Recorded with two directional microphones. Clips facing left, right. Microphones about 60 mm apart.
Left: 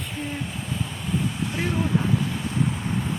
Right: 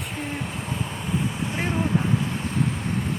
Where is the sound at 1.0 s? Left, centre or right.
Centre.